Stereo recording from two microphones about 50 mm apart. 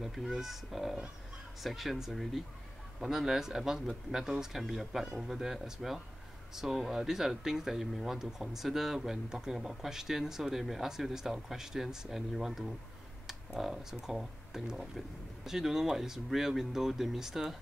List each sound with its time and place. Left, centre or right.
0.0 s speech: centre